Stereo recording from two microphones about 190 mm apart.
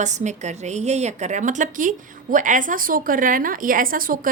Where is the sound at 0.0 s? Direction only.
40° right (ahead or behind).